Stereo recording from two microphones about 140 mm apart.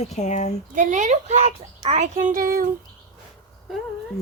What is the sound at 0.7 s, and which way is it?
A child's voice, 65° right (ahead or behind).